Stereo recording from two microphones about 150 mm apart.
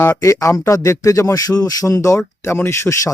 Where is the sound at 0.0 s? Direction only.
20° left (ahead or behind).